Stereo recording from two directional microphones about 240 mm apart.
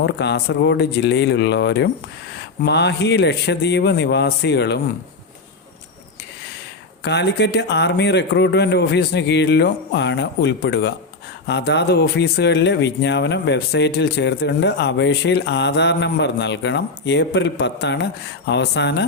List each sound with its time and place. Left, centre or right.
0.0 s speech: left
7.0 s speech: left